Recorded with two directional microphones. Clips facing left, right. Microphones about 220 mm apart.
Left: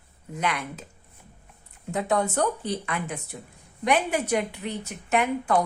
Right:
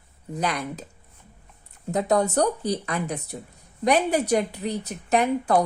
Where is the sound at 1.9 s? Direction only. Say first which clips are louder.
Right 3 dB; 40° right (ahead or behind).